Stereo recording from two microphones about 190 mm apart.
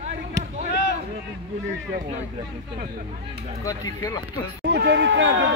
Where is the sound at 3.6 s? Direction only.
20° left (ahead or behind).